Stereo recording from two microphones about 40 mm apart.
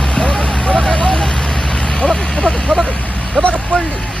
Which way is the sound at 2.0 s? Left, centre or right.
Left.